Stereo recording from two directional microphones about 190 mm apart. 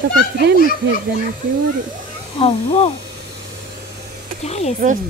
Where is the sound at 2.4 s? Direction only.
30° left (ahead or behind).